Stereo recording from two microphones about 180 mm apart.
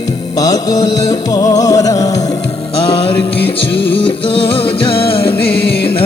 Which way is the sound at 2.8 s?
30° left (ahead or behind).